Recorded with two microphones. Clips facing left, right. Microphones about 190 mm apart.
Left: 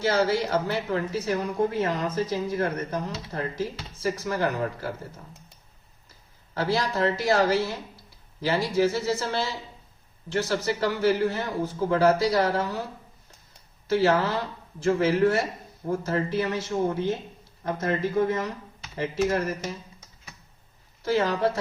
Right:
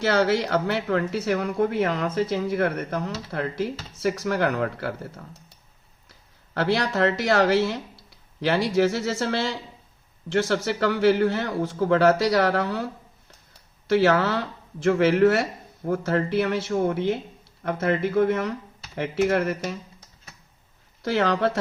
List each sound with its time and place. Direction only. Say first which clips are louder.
0.0 s speech: right 2 dB; 75° right (ahead or behind)
21.0 s speech: right 1 dB; 75° right (ahead or behind)